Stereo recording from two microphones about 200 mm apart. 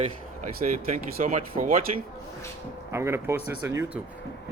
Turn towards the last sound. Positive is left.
turn(degrees=-10)  # may be behind; listen again after turning